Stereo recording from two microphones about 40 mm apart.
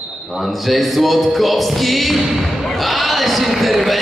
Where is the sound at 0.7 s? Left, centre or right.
Centre.